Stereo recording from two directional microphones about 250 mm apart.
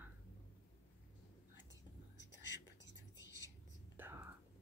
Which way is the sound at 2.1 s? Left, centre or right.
Left.